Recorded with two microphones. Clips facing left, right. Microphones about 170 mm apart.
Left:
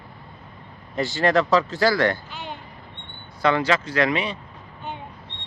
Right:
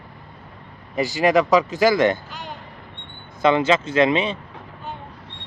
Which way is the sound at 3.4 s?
20° right (ahead or behind).